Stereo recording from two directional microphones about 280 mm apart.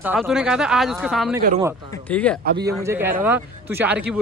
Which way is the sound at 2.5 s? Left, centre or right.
Centre.